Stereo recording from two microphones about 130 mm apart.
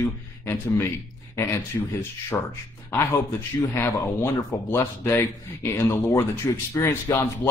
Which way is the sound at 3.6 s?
20° left (ahead or behind).